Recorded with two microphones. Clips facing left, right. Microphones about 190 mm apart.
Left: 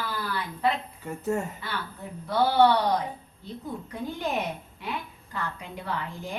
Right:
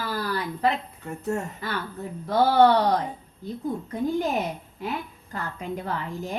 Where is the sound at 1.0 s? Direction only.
Centre (ahead or behind).